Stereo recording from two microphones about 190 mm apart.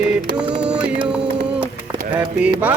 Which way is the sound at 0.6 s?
5° right (ahead or behind).